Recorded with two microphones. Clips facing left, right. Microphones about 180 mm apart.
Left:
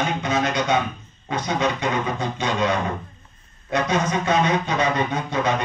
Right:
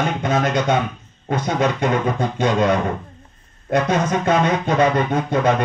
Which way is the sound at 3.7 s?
50° right (ahead or behind).